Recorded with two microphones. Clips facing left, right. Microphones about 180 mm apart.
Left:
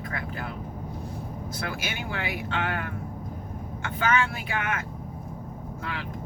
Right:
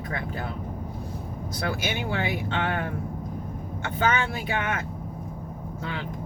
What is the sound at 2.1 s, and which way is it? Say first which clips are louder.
Speech: right 1 dB; 30° right (ahead or behind).